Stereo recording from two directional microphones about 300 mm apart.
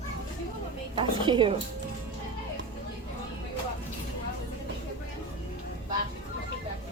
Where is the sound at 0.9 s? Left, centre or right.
Centre.